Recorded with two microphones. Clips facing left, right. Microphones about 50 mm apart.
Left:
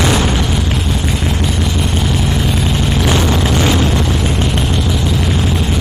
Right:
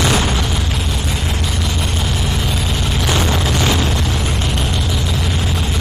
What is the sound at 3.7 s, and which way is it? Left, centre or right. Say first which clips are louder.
Explosion: left 4 dB; left.